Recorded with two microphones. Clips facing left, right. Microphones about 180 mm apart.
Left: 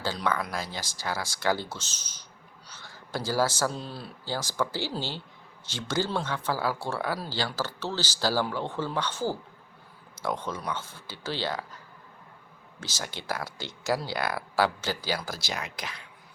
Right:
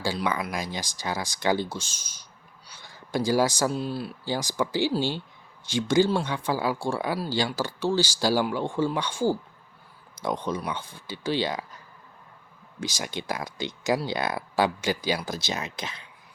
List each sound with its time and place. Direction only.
0.0 s speech: 10° right (ahead or behind)
12.8 s speech: 15° right (ahead or behind)